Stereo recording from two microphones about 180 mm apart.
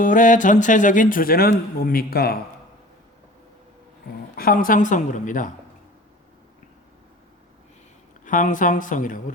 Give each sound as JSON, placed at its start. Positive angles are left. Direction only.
{"t": 0.0, "sound": "speech", "side_deg": 45}
{"t": 4.4, "sound": "speech", "side_deg": 55}
{"t": 8.2, "sound": "speech", "side_deg": 45}